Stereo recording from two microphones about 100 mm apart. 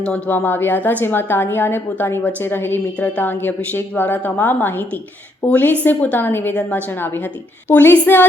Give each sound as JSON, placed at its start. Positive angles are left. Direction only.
{"t": 0.0, "sound": "a woman's voice", "side_deg": 15}